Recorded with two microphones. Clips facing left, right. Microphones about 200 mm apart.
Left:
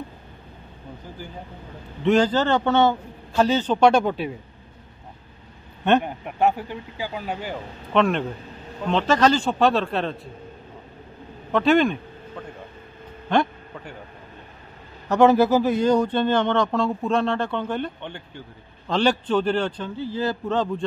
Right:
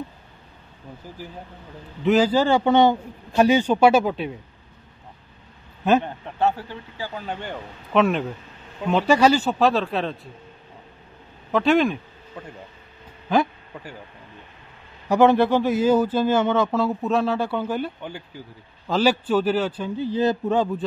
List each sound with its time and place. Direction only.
1.2 s a man's voice: centre (ahead or behind)
6.0 s speech: 15° left (ahead or behind)
11.5 s a man's voice: centre (ahead or behind)
15.0 s a man's voice: centre (ahead or behind)
20.0 s a man's voice: 20° right (ahead or behind)